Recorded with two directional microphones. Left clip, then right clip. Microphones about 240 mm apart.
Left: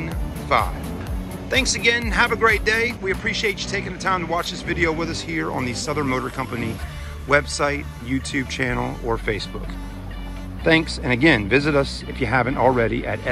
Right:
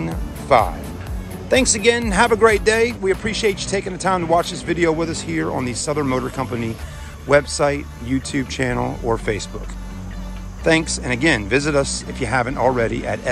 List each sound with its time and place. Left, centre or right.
0.5 s speech: centre
10.6 s speech: centre